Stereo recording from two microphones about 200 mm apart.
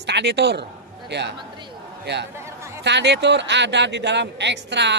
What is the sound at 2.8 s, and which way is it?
A man's voice, 60° right (ahead or behind).